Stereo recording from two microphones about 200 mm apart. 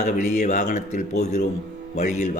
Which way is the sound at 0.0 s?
35° left (ahead or behind).